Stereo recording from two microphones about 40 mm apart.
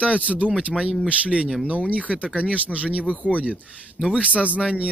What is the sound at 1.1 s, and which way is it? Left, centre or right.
Speech, right.